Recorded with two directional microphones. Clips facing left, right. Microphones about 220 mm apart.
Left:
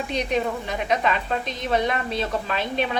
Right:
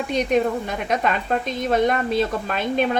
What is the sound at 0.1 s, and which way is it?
A woman's voice, 50° right (ahead or behind).